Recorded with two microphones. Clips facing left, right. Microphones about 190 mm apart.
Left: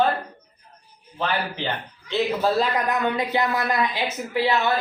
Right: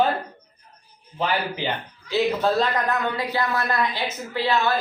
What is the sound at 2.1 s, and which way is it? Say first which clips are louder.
Speech: right 1 dB; 5° left (ahead or behind).